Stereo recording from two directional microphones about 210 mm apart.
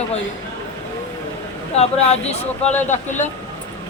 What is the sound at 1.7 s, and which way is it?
Speech, 30° left (ahead or behind).